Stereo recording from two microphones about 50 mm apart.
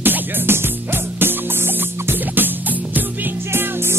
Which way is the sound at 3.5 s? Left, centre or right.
Right.